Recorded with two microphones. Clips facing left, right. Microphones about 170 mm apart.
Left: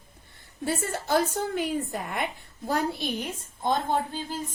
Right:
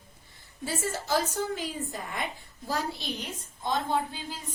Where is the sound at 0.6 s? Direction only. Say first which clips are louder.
Left 3 dB; 60° left (ahead or behind).